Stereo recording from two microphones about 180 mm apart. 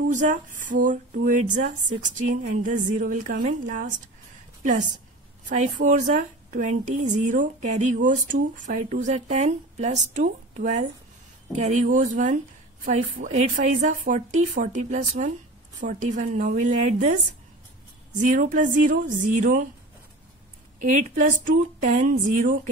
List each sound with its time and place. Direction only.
0.0 s a woman's voice: 45° right (ahead or behind)
5.5 s a woman's voice: 40° right (ahead or behind)
21.1 s a woman's voice: 45° right (ahead or behind)